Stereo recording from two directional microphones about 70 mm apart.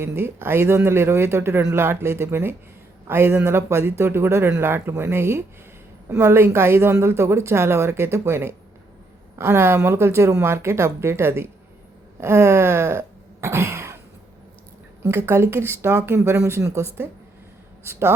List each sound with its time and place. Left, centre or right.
0.0 s speech: right
12.2 s throat clearing: right
15.0 s speech: right